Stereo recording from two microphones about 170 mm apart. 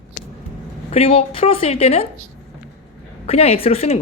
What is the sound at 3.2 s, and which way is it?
Speech, 35° left (ahead or behind).